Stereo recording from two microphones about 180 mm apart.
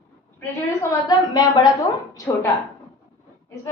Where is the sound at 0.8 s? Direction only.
20° left (ahead or behind).